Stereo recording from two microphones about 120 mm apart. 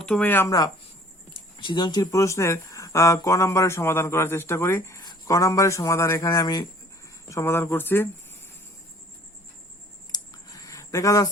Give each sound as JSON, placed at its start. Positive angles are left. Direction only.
{"t": 0.0, "sound": "speech", "side_deg": 10}
{"t": 1.5, "sound": "speech", "side_deg": 40}
{"t": 7.3, "sound": "speech", "side_deg": 20}
{"t": 10.1, "sound": "a sound", "side_deg": 30}